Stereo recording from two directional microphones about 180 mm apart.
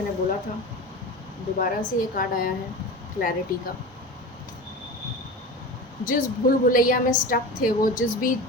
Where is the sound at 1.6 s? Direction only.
50° left (ahead or behind).